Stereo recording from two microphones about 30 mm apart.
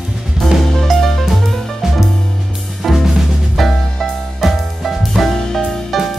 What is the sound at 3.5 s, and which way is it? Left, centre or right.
Music, centre.